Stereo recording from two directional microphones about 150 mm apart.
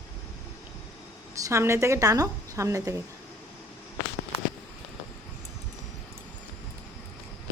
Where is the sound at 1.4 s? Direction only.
20° right (ahead or behind).